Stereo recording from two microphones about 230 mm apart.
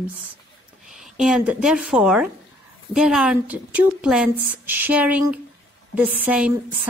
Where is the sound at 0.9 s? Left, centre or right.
Centre.